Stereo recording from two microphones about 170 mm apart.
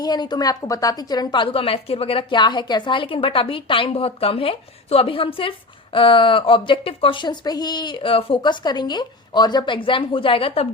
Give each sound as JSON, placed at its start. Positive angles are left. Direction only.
{"t": 0.0, "sound": "a woman's voice", "side_deg": 25}